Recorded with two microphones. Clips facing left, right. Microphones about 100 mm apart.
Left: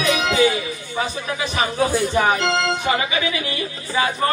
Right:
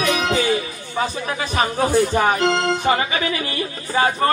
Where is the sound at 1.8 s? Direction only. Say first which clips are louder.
Right 1 dB; 40° right (ahead or behind).